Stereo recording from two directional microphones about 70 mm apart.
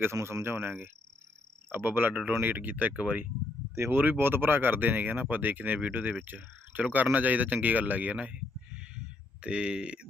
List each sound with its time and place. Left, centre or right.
0.0 s speech: right; by 8.4 s centre
9.4 s speech: centre